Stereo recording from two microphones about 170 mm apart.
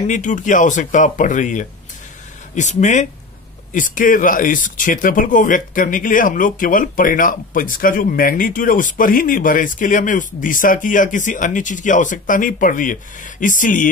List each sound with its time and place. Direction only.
0.0 s speech: 45° left (ahead or behind)